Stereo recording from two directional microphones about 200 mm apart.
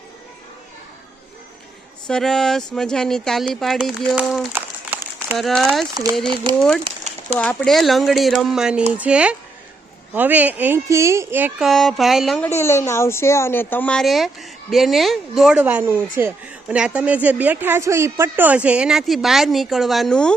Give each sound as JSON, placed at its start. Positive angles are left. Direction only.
{"t": 2.0, "sound": "speech", "side_deg": 5}
{"t": 4.5, "sound": "a sound", "side_deg": -10}
{"t": 5.4, "sound": "speech", "side_deg": 0}
{"t": 5.9, "sound": "speech", "side_deg": -20}
{"t": 6.8, "sound": "a sound", "side_deg": -35}
{"t": 7.3, "sound": "speech", "side_deg": 5}
{"t": 12.5, "sound": "speech", "side_deg": 10}